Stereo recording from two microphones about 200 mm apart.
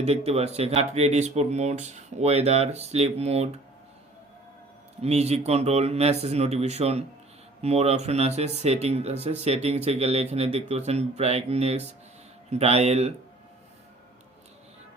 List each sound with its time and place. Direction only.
0.0 s speech: 30° right (ahead or behind)
4.9 s speech: 30° right (ahead or behind)